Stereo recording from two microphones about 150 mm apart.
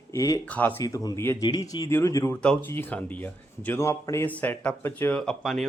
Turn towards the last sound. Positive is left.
turn(degrees=0)  # may be behind; listen again after turning